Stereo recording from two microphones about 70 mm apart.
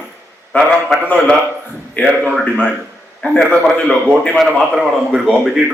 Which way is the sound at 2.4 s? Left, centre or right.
Centre.